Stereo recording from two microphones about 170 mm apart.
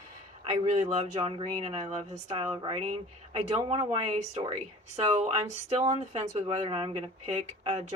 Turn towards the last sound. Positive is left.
turn(degrees=-35)  # may be behind; listen again after turning